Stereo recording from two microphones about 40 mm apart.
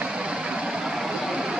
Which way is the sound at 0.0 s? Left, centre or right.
Right.